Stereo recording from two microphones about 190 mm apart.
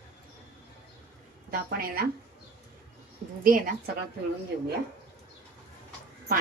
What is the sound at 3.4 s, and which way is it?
Speech, 45° right (ahead or behind).